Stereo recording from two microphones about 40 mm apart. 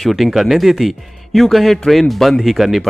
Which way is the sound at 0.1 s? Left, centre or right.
Centre.